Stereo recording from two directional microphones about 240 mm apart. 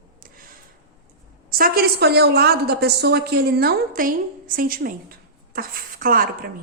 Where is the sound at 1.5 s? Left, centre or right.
Right.